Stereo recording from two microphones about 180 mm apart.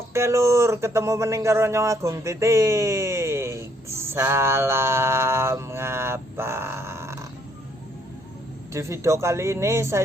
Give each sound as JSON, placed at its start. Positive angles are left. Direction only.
{"t": 0.1, "sound": "speech", "side_deg": -15}
{"t": 8.7, "sound": "speech", "side_deg": -15}